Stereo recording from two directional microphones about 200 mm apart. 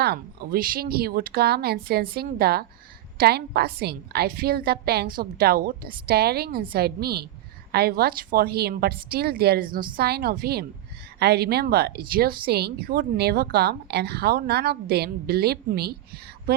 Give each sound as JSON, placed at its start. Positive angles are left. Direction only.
{"t": 0.0, "sound": "a woman's voice", "side_deg": -50}